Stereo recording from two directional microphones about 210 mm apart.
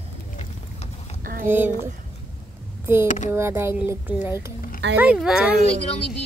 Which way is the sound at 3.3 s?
10° right (ahead or behind).